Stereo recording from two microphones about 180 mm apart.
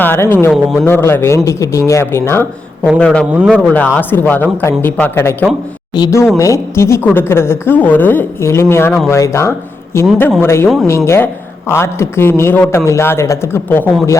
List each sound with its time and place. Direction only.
0.0 s a woman's voice: 10° left (ahead or behind)
0.5 s speech: centre (ahead or behind)
0.9 s a woman's voice: 10° left (ahead or behind)